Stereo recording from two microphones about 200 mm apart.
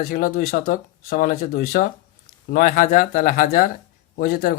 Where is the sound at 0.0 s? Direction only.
50° left (ahead or behind).